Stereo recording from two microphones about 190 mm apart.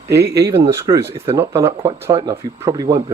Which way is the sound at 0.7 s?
15° right (ahead or behind).